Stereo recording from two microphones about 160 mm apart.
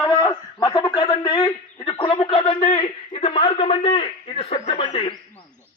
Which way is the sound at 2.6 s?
45° left (ahead or behind).